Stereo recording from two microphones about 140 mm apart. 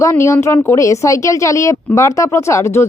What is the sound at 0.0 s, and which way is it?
Speech, 20° left (ahead or behind).